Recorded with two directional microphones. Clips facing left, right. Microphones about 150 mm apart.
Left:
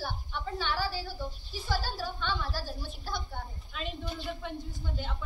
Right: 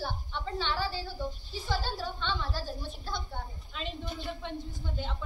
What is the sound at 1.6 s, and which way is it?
A woman's voice, 5° left (ahead or behind).